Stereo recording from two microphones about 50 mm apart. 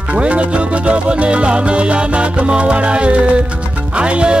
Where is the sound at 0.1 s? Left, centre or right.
Right.